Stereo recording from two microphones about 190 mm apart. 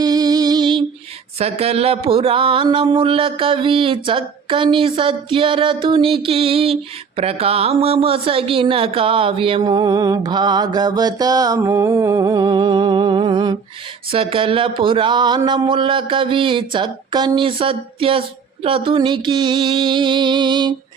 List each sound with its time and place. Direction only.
0.0 s music: 20° right (ahead or behind)
1.4 s speech: 30° right (ahead or behind)